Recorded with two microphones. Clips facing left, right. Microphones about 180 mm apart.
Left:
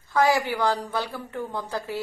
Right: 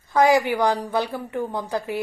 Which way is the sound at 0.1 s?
15° right (ahead or behind).